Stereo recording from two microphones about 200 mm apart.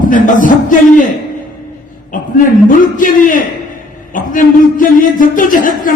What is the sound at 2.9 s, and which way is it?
A man's voice, 40° left (ahead or behind).